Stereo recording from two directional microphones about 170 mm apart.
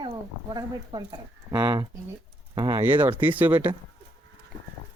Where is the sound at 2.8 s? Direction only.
10° right (ahead or behind).